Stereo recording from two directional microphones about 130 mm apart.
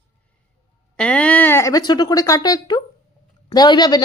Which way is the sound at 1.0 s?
10° left (ahead or behind).